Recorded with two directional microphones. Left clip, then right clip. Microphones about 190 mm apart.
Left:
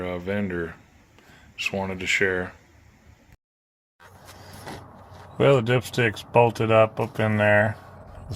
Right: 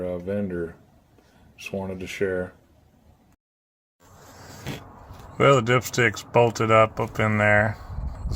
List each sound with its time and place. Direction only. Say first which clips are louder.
0.0 s speech: even; 5° right (ahead or behind)
5.4 s speech: right 1 dB; 15° left (ahead or behind)